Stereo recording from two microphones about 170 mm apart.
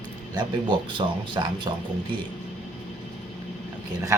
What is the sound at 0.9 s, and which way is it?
Speech, 30° right (ahead or behind).